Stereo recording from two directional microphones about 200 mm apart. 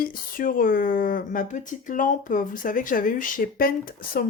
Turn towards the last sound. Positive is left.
turn(degrees=45)  # may be behind; listen again after turning